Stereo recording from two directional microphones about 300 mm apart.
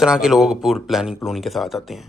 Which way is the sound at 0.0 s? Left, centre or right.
Centre.